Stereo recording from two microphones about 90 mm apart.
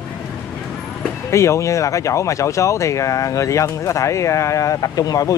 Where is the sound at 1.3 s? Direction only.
35° left (ahead or behind).